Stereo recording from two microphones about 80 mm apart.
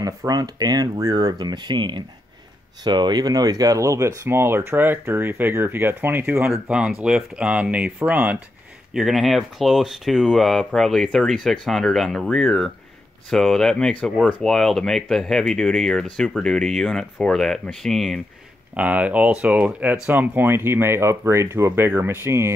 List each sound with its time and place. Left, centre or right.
0.0 s speech: right
2.8 s speech: right
6.7 s speech: centre
8.9 s speech: centre
18.8 s speech: centre; by 22.5 s right